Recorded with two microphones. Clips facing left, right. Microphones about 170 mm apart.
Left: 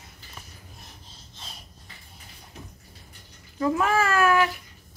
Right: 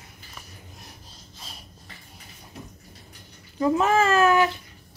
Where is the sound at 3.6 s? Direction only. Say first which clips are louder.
Right 3 dB; 20° right (ahead or behind).